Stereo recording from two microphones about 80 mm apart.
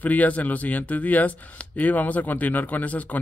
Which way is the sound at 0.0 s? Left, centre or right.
Centre.